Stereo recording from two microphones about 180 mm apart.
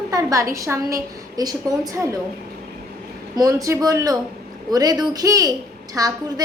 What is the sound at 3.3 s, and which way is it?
A woman's voice, 20° right (ahead or behind).